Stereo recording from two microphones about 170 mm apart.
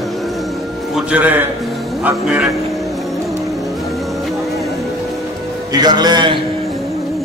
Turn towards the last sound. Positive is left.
turn(degrees=-25)  # may be behind; listen again after turning